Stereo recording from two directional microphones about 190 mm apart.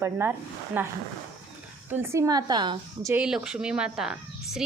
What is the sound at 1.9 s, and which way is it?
Speech, 15° right (ahead or behind).